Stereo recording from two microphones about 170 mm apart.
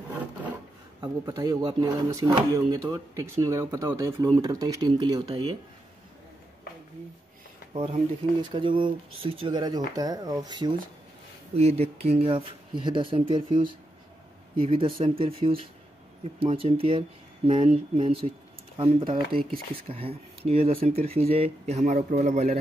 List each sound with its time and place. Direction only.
1.0 s speech: 20° right (ahead or behind)
7.7 s speech: 30° right (ahead or behind)
11.5 s speech: 40° right (ahead or behind)